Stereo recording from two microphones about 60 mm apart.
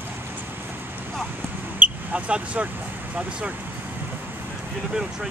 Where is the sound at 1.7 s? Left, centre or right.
Centre.